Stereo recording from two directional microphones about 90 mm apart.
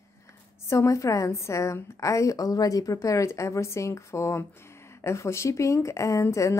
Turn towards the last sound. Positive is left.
turn(degrees=35)  # may be behind; listen again after turning